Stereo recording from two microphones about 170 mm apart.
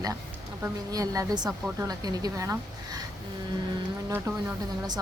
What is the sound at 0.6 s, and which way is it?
A woman's voice, 20° right (ahead or behind).